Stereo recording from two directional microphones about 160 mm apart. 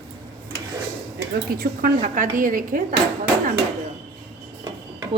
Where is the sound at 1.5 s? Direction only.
70° right (ahead or behind).